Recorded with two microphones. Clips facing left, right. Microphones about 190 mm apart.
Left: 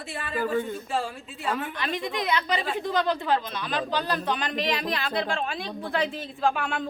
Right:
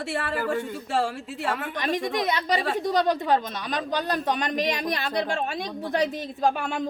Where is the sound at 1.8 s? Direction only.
45° right (ahead or behind).